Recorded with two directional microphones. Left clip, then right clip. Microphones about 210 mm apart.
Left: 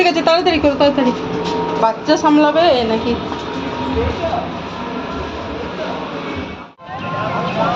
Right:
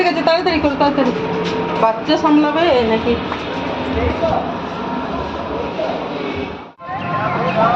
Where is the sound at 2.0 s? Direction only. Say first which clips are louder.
Left 2 dB; 15° left (ahead or behind).